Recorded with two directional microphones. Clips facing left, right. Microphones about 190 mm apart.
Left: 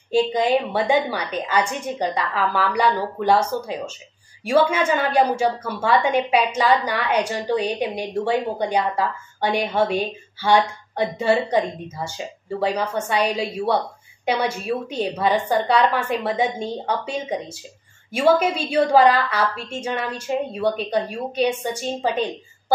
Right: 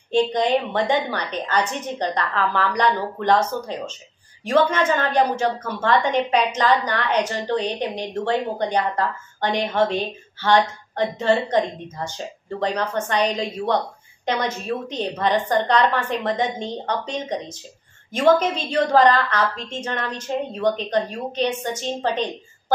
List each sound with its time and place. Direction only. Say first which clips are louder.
0.1 s a woman's voice: left 1 dB; 5° left (ahead or behind)